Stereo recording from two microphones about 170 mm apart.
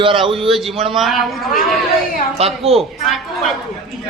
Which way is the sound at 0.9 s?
Centre (ahead or behind).